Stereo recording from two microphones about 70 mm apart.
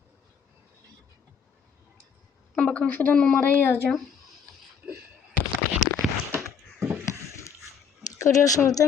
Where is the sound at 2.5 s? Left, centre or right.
Centre.